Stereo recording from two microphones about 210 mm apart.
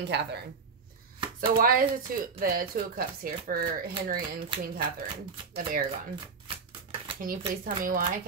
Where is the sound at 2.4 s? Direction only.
45° right (ahead or behind).